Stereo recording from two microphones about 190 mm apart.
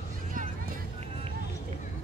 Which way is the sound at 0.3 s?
45° right (ahead or behind).